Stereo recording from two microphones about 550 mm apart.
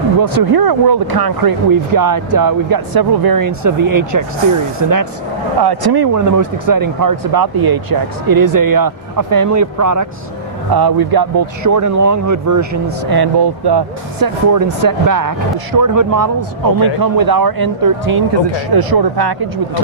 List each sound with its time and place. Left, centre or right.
0.2 s speech: right